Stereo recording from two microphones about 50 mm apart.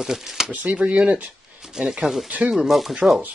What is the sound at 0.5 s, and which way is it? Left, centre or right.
Speech, right.